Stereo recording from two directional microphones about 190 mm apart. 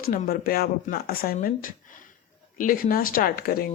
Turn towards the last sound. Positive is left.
turn(degrees=50)  # may be behind; listen again after turning